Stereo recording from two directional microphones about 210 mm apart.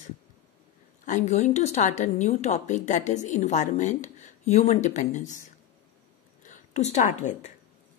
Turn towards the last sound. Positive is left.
turn(degrees=35)  # may be behind; listen again after turning